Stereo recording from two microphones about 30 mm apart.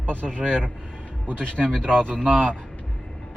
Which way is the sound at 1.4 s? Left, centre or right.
Left.